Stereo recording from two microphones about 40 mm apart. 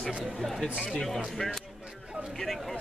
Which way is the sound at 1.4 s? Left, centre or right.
Left.